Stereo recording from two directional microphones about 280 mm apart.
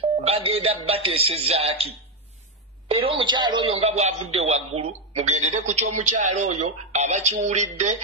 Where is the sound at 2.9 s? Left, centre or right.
Centre.